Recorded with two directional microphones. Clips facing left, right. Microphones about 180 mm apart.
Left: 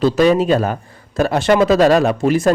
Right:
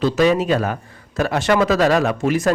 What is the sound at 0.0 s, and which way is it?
A man's voice, 35° left (ahead or behind).